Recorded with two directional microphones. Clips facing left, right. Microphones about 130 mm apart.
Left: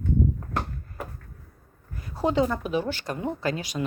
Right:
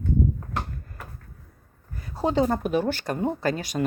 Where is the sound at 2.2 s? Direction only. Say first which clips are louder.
Right 1 dB; 35° right (ahead or behind).